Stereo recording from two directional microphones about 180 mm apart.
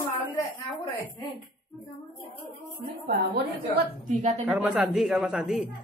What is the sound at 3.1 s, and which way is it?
A woman's voice, 60° right (ahead or behind).